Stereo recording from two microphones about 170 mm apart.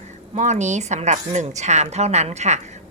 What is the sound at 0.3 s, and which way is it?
A woman's voice, 45° right (ahead or behind).